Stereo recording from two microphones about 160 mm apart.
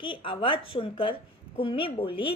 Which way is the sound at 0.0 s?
30° left (ahead or behind).